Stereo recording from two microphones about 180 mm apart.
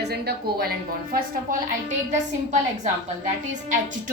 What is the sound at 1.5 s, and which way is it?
A woman's voice, 45° right (ahead or behind).